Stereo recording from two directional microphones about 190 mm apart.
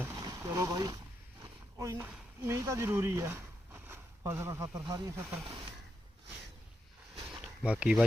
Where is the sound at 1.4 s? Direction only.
15° right (ahead or behind).